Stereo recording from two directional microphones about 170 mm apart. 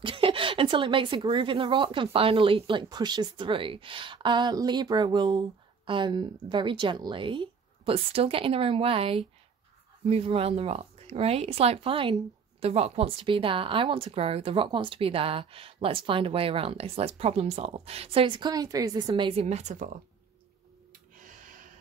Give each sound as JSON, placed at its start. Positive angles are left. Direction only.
{"t": 0.0, "sound": "a woman's voice", "side_deg": -30}
{"t": 19.4, "sound": "speech", "side_deg": -45}
{"t": 21.2, "sound": "gasp", "side_deg": -50}